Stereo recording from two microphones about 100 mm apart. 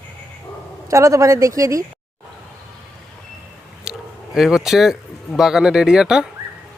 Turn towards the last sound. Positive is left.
turn(degrees=-5)  # may be behind; listen again after turning